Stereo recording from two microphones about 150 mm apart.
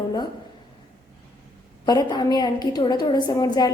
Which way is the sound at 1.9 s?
25° left (ahead or behind).